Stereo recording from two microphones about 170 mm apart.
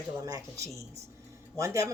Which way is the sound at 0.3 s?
20° right (ahead or behind).